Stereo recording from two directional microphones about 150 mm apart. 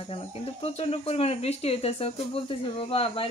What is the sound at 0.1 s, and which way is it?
Speech, 40° left (ahead or behind).